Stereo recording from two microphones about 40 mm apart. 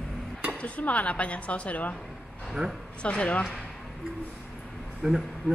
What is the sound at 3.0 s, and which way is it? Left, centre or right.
Speech, left.